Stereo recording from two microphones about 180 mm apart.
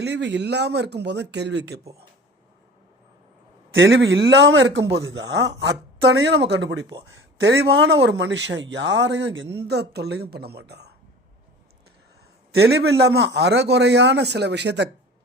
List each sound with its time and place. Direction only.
0.0 s speech: 75° right (ahead or behind)
3.8 s speech: 80° right
9.6 s speech: 65° right (ahead or behind)
12.5 s speech: 65° right (ahead or behind)